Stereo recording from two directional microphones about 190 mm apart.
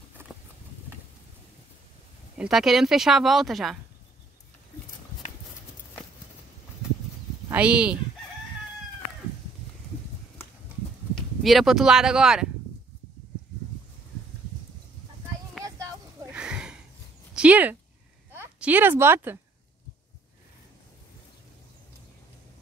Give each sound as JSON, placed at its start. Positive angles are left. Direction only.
{"t": 2.3, "sound": "speech", "side_deg": 0}
{"t": 7.4, "sound": "speech", "side_deg": -5}
{"t": 11.1, "sound": "speech", "side_deg": 0}
{"t": 15.6, "sound": "a sound", "side_deg": -15}
{"t": 16.3, "sound": "a sound", "side_deg": -5}
{"t": 17.4, "sound": "a woman's voice", "side_deg": -10}